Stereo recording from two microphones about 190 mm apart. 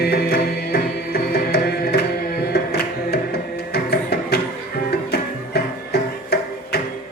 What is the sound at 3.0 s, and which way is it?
Music, 55° left (ahead or behind).